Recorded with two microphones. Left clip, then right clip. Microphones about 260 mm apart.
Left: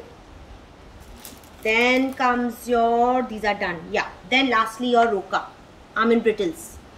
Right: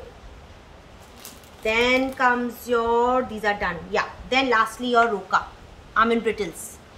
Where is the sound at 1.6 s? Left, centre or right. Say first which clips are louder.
Left 1 dB; centre.